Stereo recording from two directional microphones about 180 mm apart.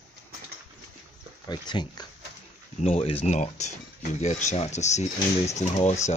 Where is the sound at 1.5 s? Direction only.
25° left (ahead or behind).